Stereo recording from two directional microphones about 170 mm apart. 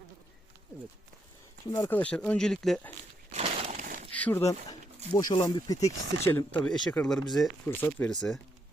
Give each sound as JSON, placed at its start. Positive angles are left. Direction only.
{"t": 1.7, "sound": "speech", "side_deg": 10}
{"t": 3.3, "sound": "a sound", "side_deg": -35}
{"t": 4.1, "sound": "speech", "side_deg": 10}
{"t": 5.1, "sound": "speech", "side_deg": 25}
{"t": 7.7, "sound": "speech", "side_deg": 10}